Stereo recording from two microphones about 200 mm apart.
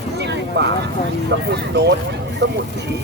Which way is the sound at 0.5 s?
55° right (ahead or behind).